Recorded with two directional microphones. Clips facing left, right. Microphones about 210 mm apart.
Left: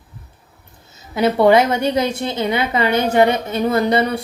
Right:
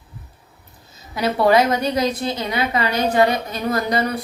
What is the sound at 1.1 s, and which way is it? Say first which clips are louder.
A woman's voice: left 4 dB; 25° left (ahead or behind).